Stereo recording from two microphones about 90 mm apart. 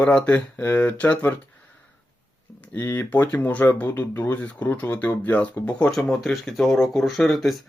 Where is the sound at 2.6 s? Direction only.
25° left (ahead or behind).